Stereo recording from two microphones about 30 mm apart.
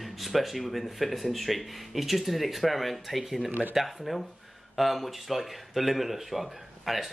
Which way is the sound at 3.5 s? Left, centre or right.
Right.